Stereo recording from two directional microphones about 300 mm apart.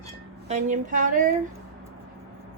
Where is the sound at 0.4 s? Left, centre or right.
Right.